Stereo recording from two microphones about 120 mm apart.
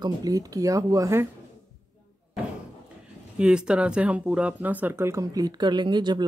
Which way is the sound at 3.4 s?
10° right (ahead or behind).